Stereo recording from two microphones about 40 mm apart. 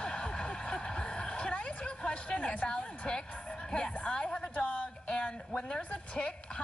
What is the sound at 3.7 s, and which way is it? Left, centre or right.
A woman's voice, left.